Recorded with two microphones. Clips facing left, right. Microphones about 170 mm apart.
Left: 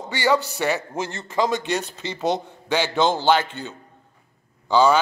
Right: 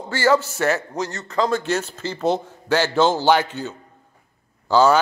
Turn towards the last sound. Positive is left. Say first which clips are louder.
# right 1 dB
turn(degrees=-5)  # may be behind; listen again after turning